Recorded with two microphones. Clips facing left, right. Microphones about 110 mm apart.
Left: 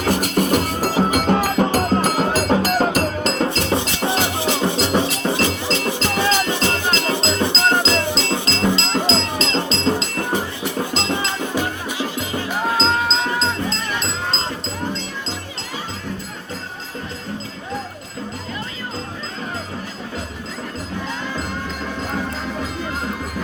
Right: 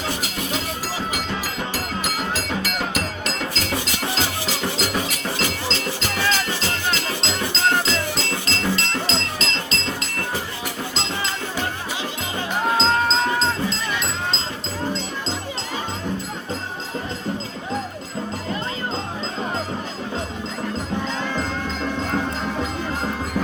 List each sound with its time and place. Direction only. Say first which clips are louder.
0.0 s music: left 9 dB; 50° left (ahead or behind); by 7.2 s 20° left (ahead or behind)
7.2 s cowbell: left 6 dB; 30° left (ahead or behind)
7.4 s music: left 1 dB; 25° left (ahead or behind)
12.7 s music: right 1 dB; centre (ahead or behind)